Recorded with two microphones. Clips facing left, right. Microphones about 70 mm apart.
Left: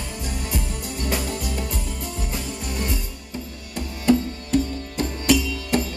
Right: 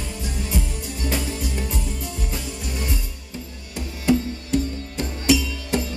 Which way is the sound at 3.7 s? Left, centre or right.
Left.